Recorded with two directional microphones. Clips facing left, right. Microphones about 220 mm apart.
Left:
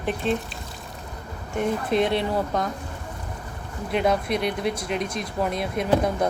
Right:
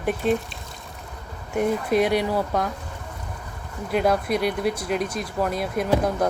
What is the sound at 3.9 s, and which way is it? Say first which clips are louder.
Speech: right 1 dB; centre (ahead or behind).